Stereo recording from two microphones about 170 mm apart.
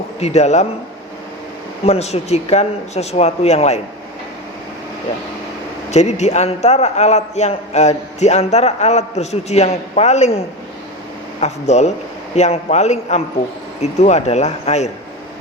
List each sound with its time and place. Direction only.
0.2 s a man's voice: 40° left (ahead or behind)
1.8 s a man's voice: 40° left (ahead or behind)
5.9 s a man's voice: 40° left (ahead or behind)